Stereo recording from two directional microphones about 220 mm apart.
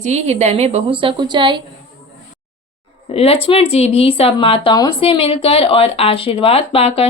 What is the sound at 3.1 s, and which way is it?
Speech, 25° left (ahead or behind).